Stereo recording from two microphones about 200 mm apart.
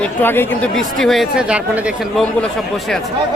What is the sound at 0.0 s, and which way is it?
Speech, 10° left (ahead or behind).